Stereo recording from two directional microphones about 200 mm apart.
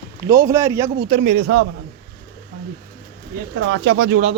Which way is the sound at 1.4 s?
90° right.